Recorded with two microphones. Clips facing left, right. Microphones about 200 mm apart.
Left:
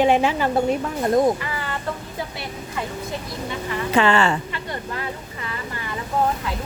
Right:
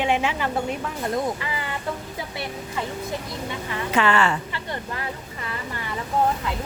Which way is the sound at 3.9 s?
30° left (ahead or behind).